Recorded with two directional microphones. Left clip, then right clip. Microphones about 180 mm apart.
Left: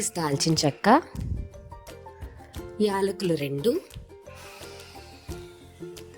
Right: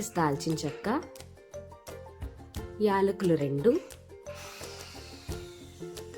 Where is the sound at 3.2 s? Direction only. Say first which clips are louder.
Even; 55° left (ahead or behind).